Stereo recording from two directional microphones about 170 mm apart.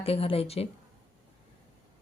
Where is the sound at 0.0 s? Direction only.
35° left (ahead or behind).